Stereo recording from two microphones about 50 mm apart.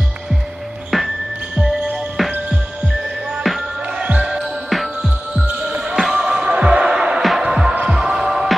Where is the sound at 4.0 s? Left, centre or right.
Right.